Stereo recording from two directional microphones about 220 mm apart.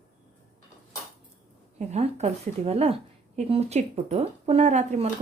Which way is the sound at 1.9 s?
30° right (ahead or behind).